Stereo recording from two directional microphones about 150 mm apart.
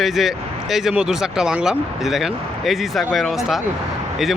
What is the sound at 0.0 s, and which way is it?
Speech, centre (ahead or behind).